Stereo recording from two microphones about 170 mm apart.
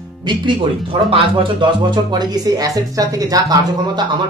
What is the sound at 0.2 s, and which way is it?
Speech, 30° right (ahead or behind).